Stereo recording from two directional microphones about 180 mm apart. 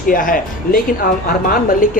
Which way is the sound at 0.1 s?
50° left (ahead or behind).